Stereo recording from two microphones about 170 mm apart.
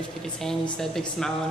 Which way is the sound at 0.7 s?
5° left (ahead or behind).